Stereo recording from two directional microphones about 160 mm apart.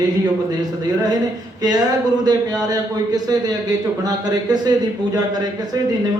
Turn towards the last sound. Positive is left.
turn(degrees=-25)  # may be behind; listen again after turning